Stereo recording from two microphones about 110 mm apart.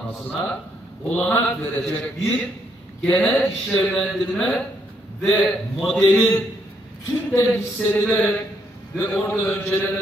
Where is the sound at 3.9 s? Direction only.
10° left (ahead or behind).